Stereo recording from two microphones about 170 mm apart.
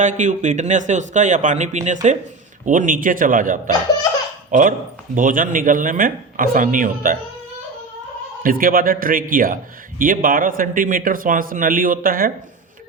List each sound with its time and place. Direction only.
0.0 s speech: 45° right (ahead or behind)
8.4 s a man's voice: 55° right (ahead or behind)